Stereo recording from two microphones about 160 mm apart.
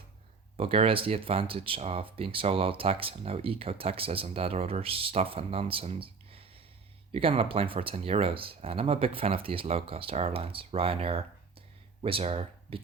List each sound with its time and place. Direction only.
0.5 s speech: 35° right (ahead or behind)